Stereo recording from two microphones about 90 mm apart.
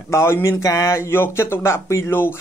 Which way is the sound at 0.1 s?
30° left (ahead or behind).